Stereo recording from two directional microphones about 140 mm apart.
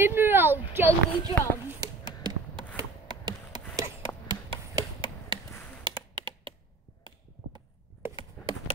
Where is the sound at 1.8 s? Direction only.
25° right (ahead or behind).